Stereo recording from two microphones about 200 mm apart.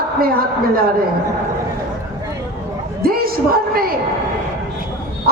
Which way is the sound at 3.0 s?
50° right (ahead or behind).